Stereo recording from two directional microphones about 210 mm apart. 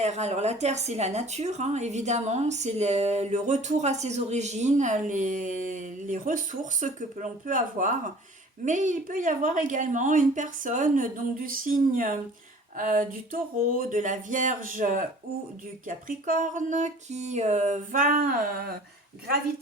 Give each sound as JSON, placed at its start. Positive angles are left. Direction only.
{"t": 0.0, "sound": "speech", "side_deg": -30}